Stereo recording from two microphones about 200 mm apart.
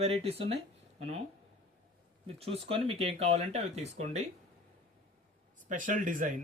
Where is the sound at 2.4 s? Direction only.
30° right (ahead or behind).